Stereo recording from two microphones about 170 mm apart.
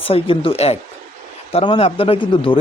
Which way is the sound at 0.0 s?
35° left (ahead or behind).